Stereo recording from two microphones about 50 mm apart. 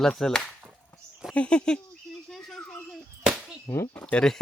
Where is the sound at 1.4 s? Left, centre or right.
Left.